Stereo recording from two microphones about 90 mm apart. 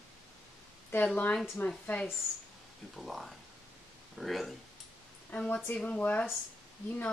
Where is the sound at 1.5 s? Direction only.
20° left (ahead or behind).